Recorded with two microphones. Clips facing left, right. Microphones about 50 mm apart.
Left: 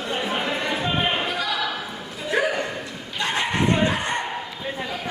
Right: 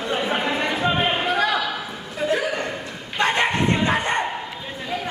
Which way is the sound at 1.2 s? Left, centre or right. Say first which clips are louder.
Right 6 dB; right.